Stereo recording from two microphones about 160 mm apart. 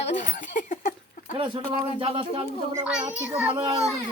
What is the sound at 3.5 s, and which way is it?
Speech, 35° right (ahead or behind).